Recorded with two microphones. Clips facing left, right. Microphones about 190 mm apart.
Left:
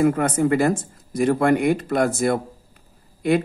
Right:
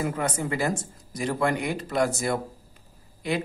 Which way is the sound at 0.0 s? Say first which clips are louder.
Left 9 dB; 55° left (ahead or behind).